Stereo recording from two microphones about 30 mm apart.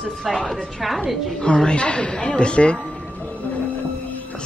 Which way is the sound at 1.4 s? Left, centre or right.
Left.